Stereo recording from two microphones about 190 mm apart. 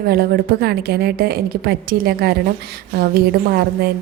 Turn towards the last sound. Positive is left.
turn(degrees=-55)  # may be behind; listen again after turning